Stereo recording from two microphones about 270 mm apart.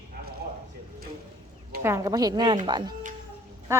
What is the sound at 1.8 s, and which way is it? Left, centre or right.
A woman's voice, centre.